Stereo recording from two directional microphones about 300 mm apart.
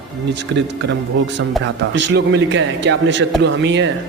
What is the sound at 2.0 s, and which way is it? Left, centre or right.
Speech, right.